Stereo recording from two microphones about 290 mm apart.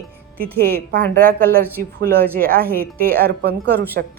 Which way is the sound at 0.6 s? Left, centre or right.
Right.